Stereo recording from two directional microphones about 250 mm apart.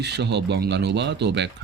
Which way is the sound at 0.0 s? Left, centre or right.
Right.